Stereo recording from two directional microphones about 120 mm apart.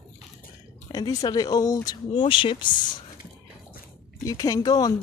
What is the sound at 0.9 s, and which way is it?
Speech, 35° left (ahead or behind).